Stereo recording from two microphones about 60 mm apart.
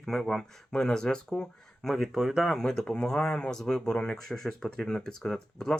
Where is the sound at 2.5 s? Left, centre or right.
Centre.